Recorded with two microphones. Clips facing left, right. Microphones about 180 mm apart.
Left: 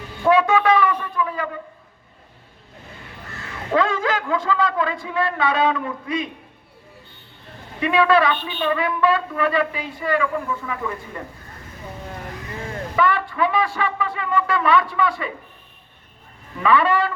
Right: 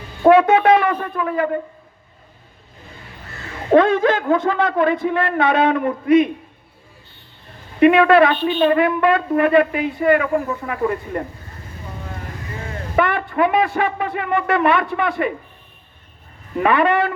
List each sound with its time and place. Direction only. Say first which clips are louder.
0.2 s shofar: right 5 dB; 55° right (ahead or behind)
3.7 s shofar: right 7 dB; 55° right (ahead or behind)
4.2 s a woman's voice: right 4 dB; 50° right (ahead or behind)
5.0 s shofar: right 4 dB; 55° right (ahead or behind)
7.8 s a woman's voice: right 6 dB; 55° right (ahead or behind)
13.0 s a man's voice: right 3 dB; 55° right (ahead or behind)
13.7 s shofar: right 4 dB; 55° right (ahead or behind)
16.6 s shofar: right 2 dB; 55° right (ahead or behind)